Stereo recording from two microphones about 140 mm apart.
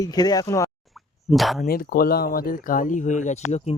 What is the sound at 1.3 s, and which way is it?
Speech, centre (ahead or behind).